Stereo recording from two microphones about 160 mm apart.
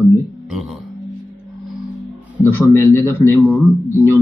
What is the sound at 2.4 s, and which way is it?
Speech, 15° left (ahead or behind).